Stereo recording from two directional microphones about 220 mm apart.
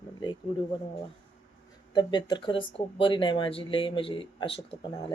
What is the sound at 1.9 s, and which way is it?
Speech, 20° left (ahead or behind).